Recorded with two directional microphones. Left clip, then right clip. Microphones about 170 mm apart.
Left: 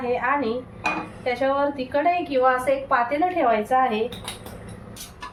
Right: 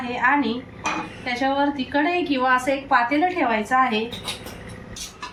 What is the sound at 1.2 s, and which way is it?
A woman's voice, 60° left (ahead or behind).